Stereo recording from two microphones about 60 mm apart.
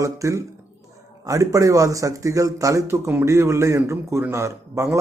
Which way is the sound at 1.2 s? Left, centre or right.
Right.